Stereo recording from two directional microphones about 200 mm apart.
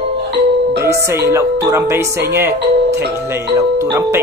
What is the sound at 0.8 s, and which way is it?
Speech, 15° right (ahead or behind).